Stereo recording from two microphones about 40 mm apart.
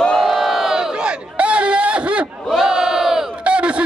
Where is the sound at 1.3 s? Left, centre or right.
Right.